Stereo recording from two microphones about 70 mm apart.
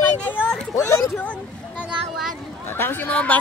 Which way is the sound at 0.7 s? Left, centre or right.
Left.